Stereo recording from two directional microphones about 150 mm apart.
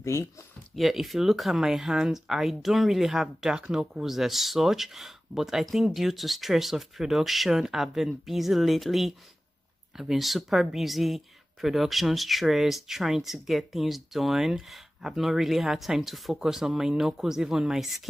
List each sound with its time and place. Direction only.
0.0 s speech: 20° left (ahead or behind)
0.7 s speech: centre (ahead or behind)